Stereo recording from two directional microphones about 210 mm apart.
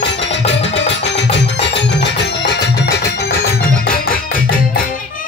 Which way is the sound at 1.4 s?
55° left (ahead or behind).